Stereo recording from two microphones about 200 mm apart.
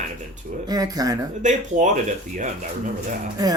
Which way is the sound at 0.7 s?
20° right (ahead or behind).